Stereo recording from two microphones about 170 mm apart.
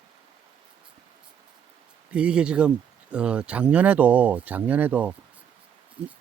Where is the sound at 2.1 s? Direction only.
5° right (ahead or behind).